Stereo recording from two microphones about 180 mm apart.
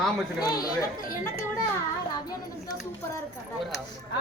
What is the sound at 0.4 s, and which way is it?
Speech, 20° left (ahead or behind).